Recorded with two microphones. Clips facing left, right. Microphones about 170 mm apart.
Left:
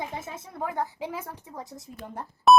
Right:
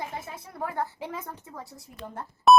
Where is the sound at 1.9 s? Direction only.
15° right (ahead or behind).